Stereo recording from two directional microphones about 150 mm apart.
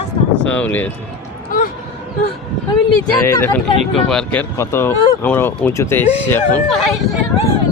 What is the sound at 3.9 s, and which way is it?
Speech, 5° left (ahead or behind).